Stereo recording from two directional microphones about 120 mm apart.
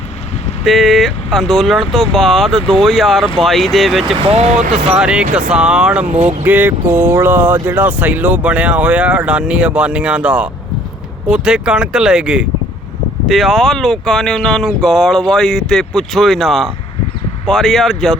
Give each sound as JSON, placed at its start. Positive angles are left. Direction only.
{"t": 0.6, "sound": "speech", "side_deg": 0}
{"t": 4.3, "sound": "speech", "side_deg": -70}
{"t": 4.9, "sound": "speech", "side_deg": -10}
{"t": 6.1, "sound": "speech", "side_deg": -85}
{"t": 6.4, "sound": "speech", "side_deg": -15}